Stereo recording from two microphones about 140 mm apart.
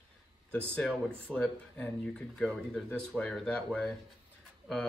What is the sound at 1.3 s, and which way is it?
Speech, 5° left (ahead or behind).